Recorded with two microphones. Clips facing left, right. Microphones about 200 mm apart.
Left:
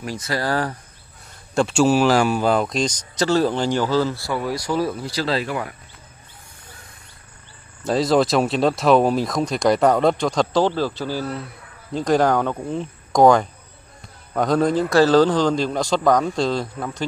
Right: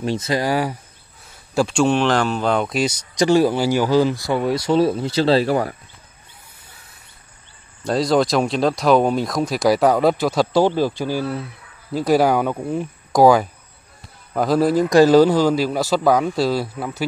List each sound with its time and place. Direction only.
0.0 s a man's voice: 25° right (ahead or behind)
1.5 s speech: centre (ahead or behind)
3.2 s speech: 15° right (ahead or behind); by 5.8 s 35° right (ahead or behind)
7.8 s a man's voice: centre (ahead or behind)